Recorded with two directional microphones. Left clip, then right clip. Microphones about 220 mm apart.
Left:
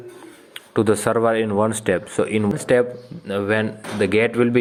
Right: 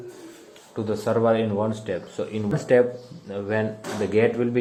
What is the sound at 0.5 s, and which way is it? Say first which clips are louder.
Speech: left 10 dB; 30° left (ahead or behind).